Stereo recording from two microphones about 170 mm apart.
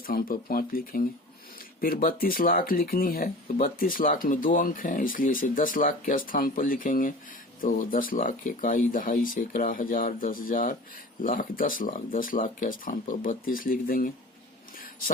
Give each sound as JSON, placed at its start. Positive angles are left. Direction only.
{"t": 0.1, "sound": "speech", "side_deg": 55}